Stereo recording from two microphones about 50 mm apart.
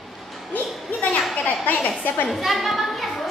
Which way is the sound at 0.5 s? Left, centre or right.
Left.